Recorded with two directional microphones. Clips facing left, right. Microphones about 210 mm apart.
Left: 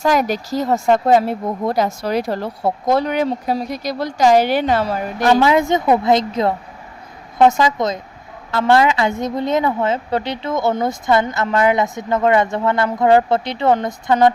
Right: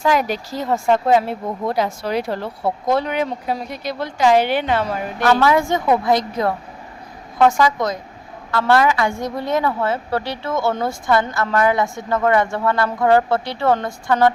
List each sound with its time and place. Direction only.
0.0 s speech: 40° left (ahead or behind)
5.3 s a woman's voice: 20° left (ahead or behind)